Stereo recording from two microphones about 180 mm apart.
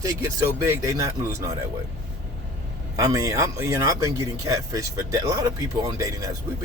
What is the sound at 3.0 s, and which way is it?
Speech, 20° right (ahead or behind).